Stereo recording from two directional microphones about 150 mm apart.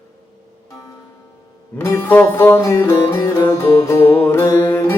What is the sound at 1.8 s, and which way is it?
Music, 15° left (ahead or behind).